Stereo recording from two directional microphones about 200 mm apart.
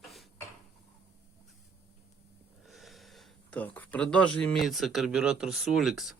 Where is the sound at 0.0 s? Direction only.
Centre (ahead or behind).